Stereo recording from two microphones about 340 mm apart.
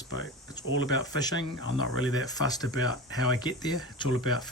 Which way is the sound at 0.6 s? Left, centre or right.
Centre.